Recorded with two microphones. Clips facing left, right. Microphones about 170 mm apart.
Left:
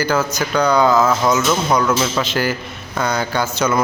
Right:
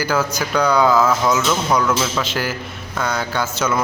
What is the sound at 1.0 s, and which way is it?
A man's voice, 5° left (ahead or behind).